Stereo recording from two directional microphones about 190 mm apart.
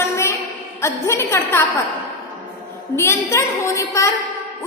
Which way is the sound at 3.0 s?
15° left (ahead or behind).